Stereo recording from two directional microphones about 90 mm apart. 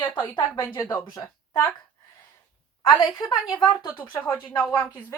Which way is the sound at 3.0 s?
50° left (ahead or behind).